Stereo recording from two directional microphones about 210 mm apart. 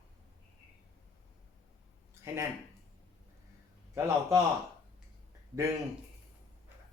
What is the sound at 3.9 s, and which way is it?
Speech, 15° right (ahead or behind).